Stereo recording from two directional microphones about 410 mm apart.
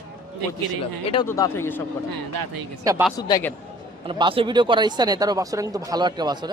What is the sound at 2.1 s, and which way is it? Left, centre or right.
Speech, right.